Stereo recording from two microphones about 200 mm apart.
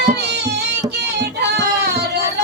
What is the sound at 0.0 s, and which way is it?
Music, 55° right (ahead or behind).